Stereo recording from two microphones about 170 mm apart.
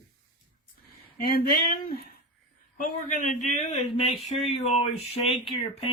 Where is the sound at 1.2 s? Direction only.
60° left (ahead or behind).